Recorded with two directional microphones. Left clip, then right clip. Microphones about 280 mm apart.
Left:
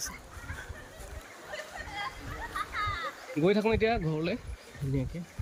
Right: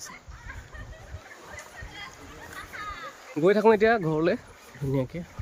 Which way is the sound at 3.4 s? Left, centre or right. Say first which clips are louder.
Right 7 dB; centre.